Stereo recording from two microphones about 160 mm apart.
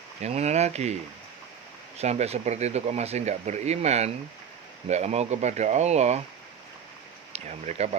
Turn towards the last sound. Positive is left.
turn(degrees=-45)  # may be behind; listen again after turning